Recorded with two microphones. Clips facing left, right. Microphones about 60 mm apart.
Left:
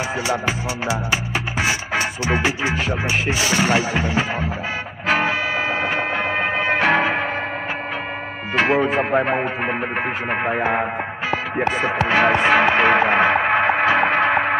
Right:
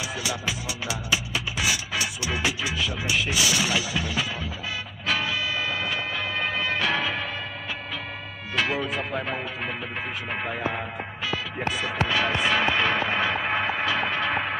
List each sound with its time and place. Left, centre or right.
0.3 s music: left
8.5 s speech: left
10.3 s music: left